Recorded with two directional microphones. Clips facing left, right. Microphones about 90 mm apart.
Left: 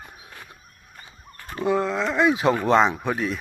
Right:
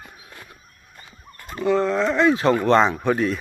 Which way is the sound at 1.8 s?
Centre (ahead or behind).